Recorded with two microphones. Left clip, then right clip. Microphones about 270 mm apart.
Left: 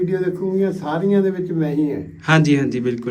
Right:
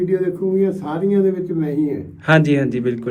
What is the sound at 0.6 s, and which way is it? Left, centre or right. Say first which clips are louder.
A man's voice: right 1 dB; centre.